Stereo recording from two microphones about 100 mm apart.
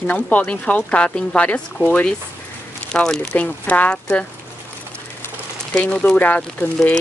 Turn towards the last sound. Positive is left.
turn(degrees=15)  # may be behind; listen again after turning